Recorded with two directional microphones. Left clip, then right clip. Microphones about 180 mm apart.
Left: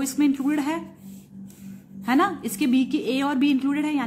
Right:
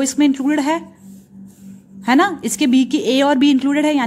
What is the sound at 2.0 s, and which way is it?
A woman's voice, 40° right (ahead or behind).